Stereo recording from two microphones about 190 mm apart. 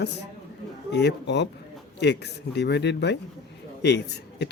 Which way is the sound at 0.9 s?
65° left (ahead or behind).